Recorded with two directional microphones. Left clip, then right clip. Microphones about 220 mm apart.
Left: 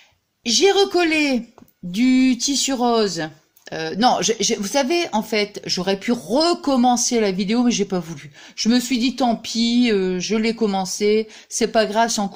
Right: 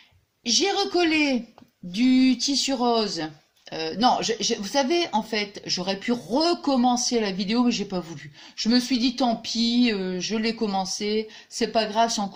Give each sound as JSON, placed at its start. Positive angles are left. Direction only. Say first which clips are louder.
{"t": 0.4, "sound": "speech", "louder": "left 7 dB", "side_deg": 40}